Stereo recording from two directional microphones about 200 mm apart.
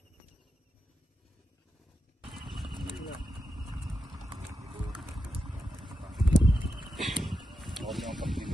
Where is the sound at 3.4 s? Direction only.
20° right (ahead or behind).